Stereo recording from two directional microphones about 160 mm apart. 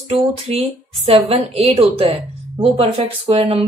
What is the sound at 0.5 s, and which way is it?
A woman's voice, 40° right (ahead or behind).